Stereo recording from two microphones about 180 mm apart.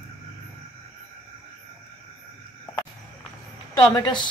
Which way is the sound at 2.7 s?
20° left (ahead or behind).